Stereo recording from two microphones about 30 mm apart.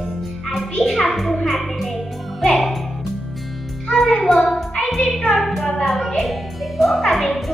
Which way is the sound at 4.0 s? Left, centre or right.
Centre.